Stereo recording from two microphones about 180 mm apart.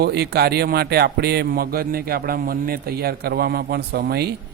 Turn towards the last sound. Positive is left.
turn(degrees=-60)  # may be behind; listen again after turning